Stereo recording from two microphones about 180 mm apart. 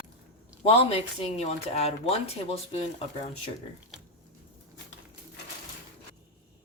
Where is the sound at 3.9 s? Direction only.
Centre (ahead or behind).